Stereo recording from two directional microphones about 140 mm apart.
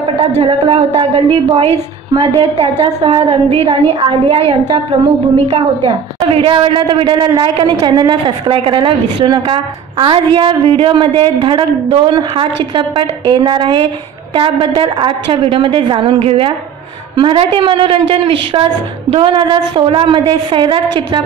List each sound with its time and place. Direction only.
0.4 s a woman's voice: 40° right (ahead or behind)